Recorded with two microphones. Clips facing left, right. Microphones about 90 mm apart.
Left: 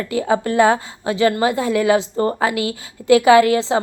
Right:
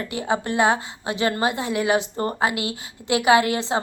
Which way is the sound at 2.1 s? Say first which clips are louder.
Left 6 dB; 20° left (ahead or behind).